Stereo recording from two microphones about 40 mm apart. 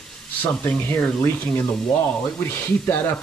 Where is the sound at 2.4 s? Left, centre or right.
Left.